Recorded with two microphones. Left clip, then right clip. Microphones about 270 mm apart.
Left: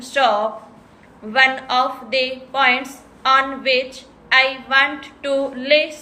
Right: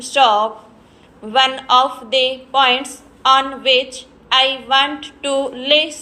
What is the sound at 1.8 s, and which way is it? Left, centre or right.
Speech, centre.